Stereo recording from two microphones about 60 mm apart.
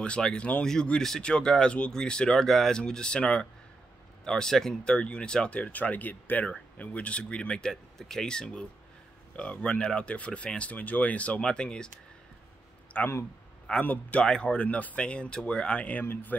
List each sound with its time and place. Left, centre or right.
0.0 s speech: centre
7.7 s speech: centre
12.9 s speech: left